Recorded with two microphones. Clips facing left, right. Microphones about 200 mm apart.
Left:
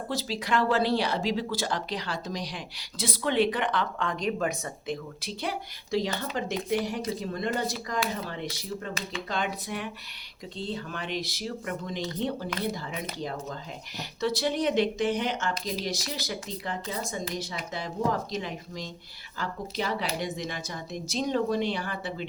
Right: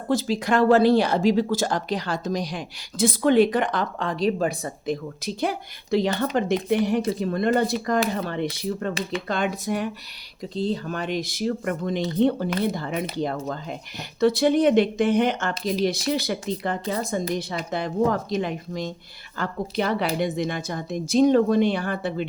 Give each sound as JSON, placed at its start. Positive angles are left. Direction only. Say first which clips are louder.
{"t": 0.1, "sound": "a woman's voice", "louder": "right 8 dB", "side_deg": -50}
{"t": 9.3, "sound": "a woman's voice", "louder": "right 6 dB", "side_deg": -50}